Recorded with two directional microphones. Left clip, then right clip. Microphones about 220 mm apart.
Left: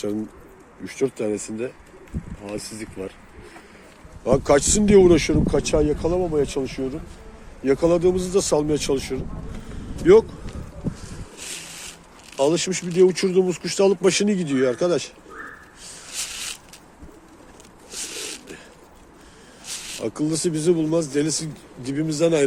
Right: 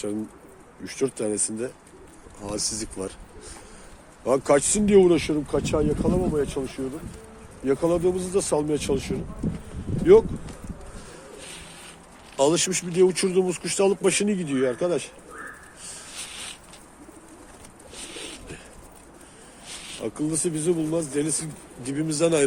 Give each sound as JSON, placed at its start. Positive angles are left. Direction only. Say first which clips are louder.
{"t": 0.9, "sound": "speech", "louder": "left 2 dB", "side_deg": 20}
{"t": 2.4, "sound": "speech", "louder": "right 3 dB", "side_deg": -5}
{"t": 4.3, "sound": "speech", "louder": "left 3 dB", "side_deg": 10}
{"t": 12.4, "sound": "speech", "louder": "left 1 dB", "side_deg": 5}
{"t": 17.9, "sound": "pigeon", "louder": "left 6 dB", "side_deg": 45}
{"t": 19.6, "sound": "snake", "louder": "left 5 dB", "side_deg": 45}
{"t": 20.0, "sound": "speech", "louder": "left 3 dB", "side_deg": 20}